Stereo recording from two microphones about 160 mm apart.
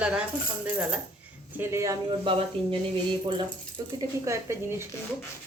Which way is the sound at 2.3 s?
35° right (ahead or behind).